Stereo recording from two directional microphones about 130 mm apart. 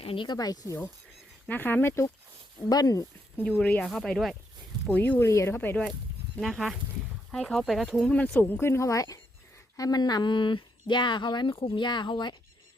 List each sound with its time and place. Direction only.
0.0 s speech: 40° left (ahead or behind)
1.5 s speech: 15° left (ahead or behind)
3.3 s speech: 10° left (ahead or behind)
4.9 s speech: 15° left (ahead or behind)
6.4 s speech: centre (ahead or behind)
8.1 s speech: 10° left (ahead or behind); by 12.4 s 35° left (ahead or behind)